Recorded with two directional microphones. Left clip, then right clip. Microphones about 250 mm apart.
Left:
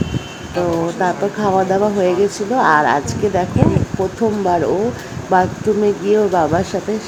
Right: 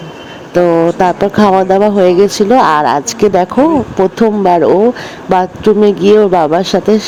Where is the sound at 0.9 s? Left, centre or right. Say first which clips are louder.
Right 8 dB; right.